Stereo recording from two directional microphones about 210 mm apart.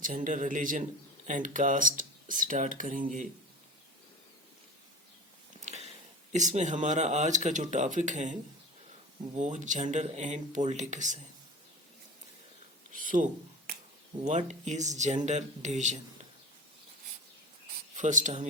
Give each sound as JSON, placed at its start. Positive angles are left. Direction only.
{"t": 0.0, "sound": "speech", "side_deg": -40}
{"t": 5.5, "sound": "a sound", "side_deg": -30}
{"t": 6.3, "sound": "speech", "side_deg": -35}
{"t": 12.9, "sound": "a sound", "side_deg": -40}
{"t": 14.3, "sound": "speech", "side_deg": -35}
{"t": 17.9, "sound": "speech", "side_deg": -35}